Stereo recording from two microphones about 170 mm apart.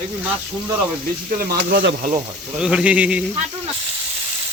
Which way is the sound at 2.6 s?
5° right (ahead or behind).